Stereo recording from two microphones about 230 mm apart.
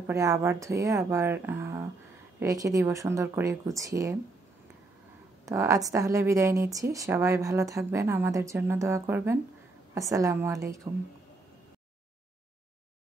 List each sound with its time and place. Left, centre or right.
0.0 s a woman's voice: centre
5.4 s a woman's voice: centre